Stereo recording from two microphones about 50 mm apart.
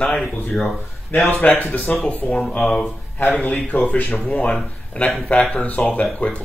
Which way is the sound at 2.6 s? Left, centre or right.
Centre.